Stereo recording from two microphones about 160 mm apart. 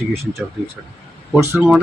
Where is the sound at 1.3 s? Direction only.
15° right (ahead or behind).